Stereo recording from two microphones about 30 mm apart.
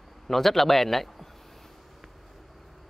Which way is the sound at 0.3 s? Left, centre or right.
Centre.